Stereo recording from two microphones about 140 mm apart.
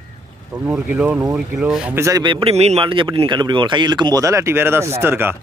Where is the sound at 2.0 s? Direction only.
30° right (ahead or behind).